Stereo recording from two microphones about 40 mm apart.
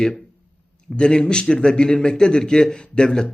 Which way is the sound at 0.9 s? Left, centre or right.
Left.